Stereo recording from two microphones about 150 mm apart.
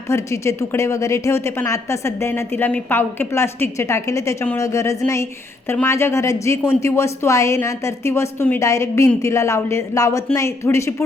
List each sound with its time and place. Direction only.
0.1 s a woman's voice: 20° left (ahead or behind)